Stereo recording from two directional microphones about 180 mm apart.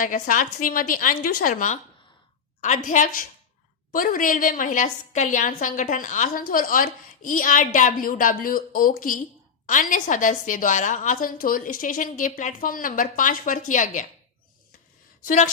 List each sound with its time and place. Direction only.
0.0 s a woman's voice: 45° left (ahead or behind)